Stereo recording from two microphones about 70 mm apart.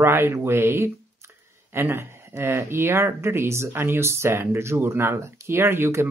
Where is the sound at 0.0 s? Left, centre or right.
Right.